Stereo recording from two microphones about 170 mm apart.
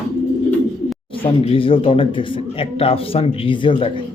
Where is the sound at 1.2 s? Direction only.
30° left (ahead or behind).